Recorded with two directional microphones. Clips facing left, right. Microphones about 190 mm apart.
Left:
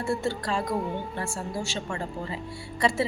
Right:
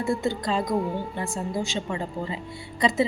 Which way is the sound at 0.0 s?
15° right (ahead or behind).